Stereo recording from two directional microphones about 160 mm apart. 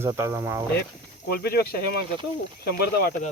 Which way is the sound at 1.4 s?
75° left (ahead or behind).